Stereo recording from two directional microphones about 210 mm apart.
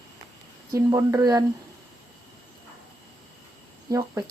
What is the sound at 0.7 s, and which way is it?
Speech, 15° right (ahead or behind).